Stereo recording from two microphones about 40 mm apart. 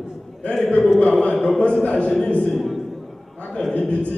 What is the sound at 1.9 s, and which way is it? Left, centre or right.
Speech, left.